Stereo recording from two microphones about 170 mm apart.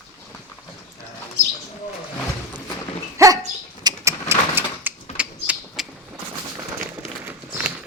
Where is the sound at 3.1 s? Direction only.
20° right (ahead or behind).